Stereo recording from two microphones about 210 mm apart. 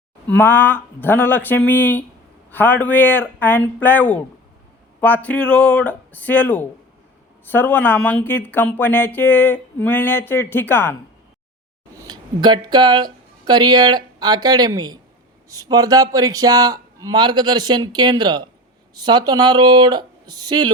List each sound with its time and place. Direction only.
0.3 s speech: 10° left (ahead or behind)
11.9 s a man's voice: 20° right (ahead or behind)